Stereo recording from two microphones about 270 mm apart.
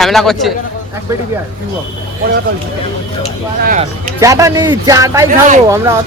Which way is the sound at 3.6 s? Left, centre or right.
Right.